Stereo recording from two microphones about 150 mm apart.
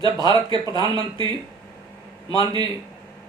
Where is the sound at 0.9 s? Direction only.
30° right (ahead or behind).